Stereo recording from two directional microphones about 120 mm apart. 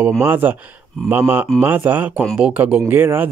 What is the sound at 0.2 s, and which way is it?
Speech, 15° right (ahead or behind).